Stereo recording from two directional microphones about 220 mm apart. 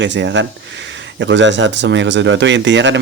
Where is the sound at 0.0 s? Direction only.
55° right (ahead or behind).